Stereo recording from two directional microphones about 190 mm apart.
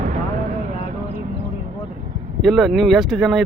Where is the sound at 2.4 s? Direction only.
Centre (ahead or behind).